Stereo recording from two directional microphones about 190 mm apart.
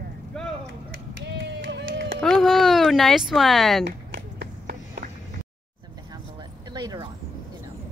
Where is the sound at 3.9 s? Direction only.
60° right (ahead or behind).